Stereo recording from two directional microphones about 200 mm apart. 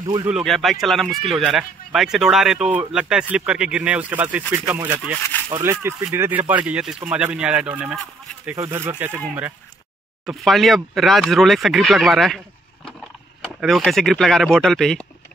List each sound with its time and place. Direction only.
0.0 s speech: 20° right (ahead or behind)
0.3 s speech: centre (ahead or behind)
10.2 s speech: centre (ahead or behind)
13.4 s speech: centre (ahead or behind)